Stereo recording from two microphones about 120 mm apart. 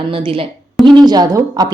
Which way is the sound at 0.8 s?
35° right (ahead or behind).